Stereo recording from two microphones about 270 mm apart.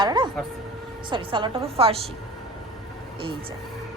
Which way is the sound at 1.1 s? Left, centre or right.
Centre.